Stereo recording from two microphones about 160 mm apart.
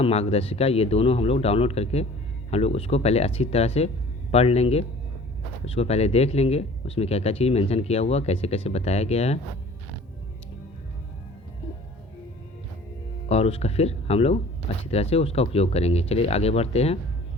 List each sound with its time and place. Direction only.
0.0 s speech: 40° left (ahead or behind)
13.2 s speech: 40° left (ahead or behind)